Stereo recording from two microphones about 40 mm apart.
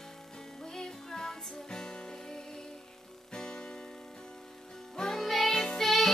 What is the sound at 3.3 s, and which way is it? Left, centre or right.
Music, centre.